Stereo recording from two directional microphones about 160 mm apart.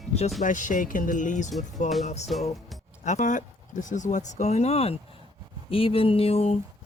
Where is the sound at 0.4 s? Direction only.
50° left (ahead or behind).